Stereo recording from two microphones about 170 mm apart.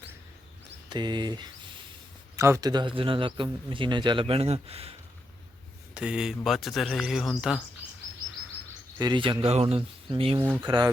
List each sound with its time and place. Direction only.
0.9 s speech: 25° right (ahead or behind)
5.9 s speech: 5° right (ahead or behind)
9.0 s speech: 25° right (ahead or behind)